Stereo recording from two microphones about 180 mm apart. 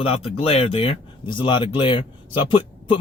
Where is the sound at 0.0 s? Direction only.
35° left (ahead or behind).